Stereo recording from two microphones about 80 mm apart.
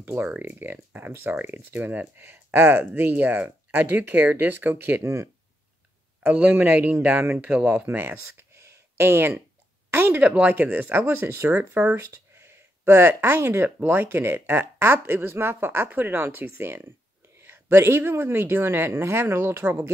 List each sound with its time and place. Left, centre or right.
0.0 s speech: right
6.2 s speech: centre
11.5 s speech: centre
12.1 s a sound: right
13.8 s speech: right